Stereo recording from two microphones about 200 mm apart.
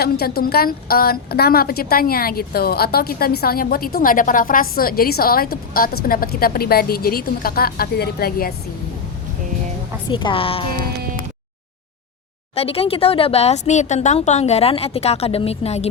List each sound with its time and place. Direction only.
0.0 s a woman's voice: 50° left (ahead or behind)
10.1 s a woman's voice: 25° left (ahead or behind)
12.5 s speech: 30° left (ahead or behind)